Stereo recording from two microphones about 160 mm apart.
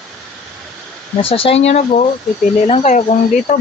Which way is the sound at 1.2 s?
35° left (ahead or behind).